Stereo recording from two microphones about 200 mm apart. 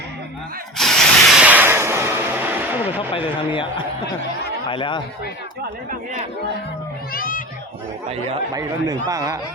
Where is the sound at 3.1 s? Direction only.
25° left (ahead or behind).